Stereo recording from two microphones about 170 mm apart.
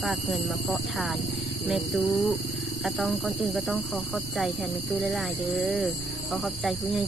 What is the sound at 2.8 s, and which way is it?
Speech, centre (ahead or behind).